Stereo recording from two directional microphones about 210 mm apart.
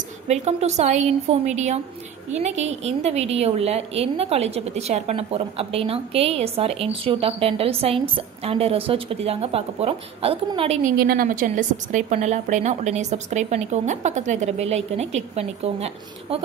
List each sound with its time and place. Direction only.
0.3 s a woman's voice: 30° right (ahead or behind)
10.8 s a woman's voice: 45° right (ahead or behind); by 15.9 s 30° right (ahead or behind)